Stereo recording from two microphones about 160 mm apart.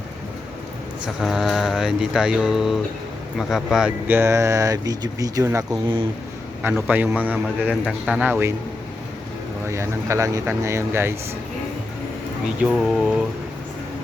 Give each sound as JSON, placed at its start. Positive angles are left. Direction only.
{"t": 1.0, "sound": "speech", "side_deg": 0}
{"t": 6.6, "sound": "speech", "side_deg": -10}
{"t": 9.6, "sound": "speech", "side_deg": -15}
{"t": 12.6, "sound": "speech", "side_deg": 0}